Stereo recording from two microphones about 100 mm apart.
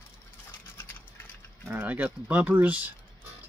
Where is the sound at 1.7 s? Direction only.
20° right (ahead or behind).